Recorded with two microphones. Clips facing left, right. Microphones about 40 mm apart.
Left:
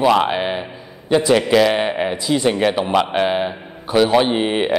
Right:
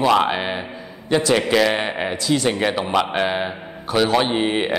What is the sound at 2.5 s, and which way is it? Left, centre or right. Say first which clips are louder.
A man's voice: left 3 dB; centre.